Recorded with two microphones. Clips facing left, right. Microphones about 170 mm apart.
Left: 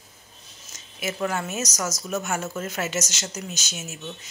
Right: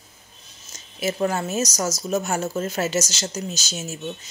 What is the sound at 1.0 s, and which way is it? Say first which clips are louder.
Speech: right 4 dB; 35° right (ahead or behind).